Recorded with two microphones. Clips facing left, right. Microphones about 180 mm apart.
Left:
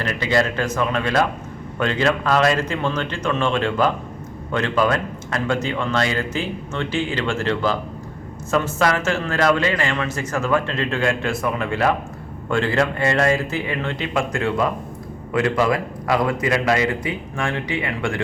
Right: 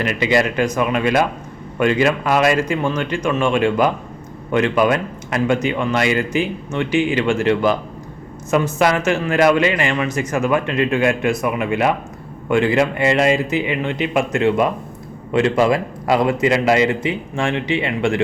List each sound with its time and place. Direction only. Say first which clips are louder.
0.0 s a man's voice: right 3 dB; 15° right (ahead or behind)